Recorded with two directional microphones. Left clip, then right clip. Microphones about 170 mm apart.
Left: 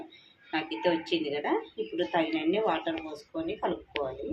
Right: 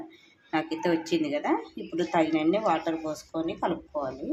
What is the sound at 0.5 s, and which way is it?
Speech, 60° right (ahead or behind).